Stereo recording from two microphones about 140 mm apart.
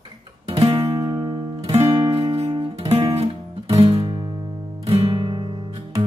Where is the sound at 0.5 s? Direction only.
40° right (ahead or behind).